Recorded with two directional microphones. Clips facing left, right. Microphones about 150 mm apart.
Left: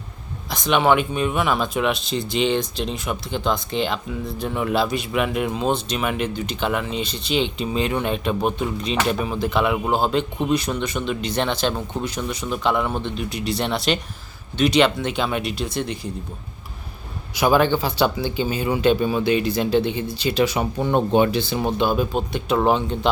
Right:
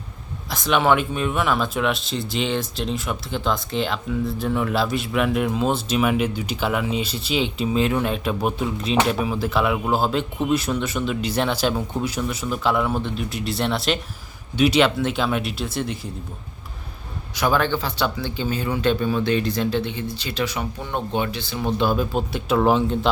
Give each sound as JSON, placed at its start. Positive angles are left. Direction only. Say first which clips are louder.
{"t": 0.5, "sound": "speech", "louder": "left 1 dB", "side_deg": 0}
{"t": 17.3, "sound": "speech", "louder": "left 3 dB", "side_deg": 10}
{"t": 21.8, "sound": "speech", "louder": "right 1 dB", "side_deg": 0}